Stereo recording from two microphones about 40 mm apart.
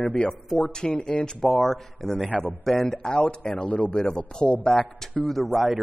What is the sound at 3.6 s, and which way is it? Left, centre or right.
Speech, left.